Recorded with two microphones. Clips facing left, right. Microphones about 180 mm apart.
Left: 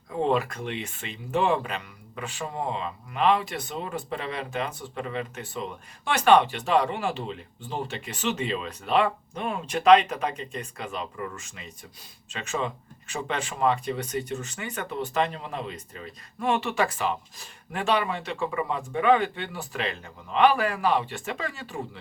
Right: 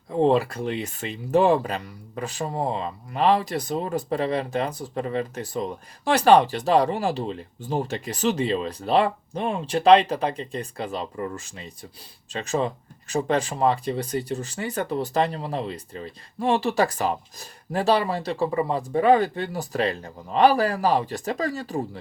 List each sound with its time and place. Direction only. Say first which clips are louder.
0.1 s speech: right 5 dB; 35° right (ahead or behind)